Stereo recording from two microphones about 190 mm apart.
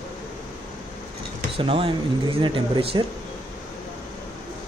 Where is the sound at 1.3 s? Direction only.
30° right (ahead or behind).